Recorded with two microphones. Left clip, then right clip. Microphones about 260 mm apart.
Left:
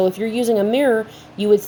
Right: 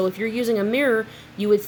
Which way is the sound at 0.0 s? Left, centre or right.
Centre.